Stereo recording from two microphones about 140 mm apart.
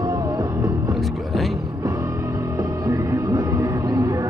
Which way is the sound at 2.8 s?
20° right (ahead or behind).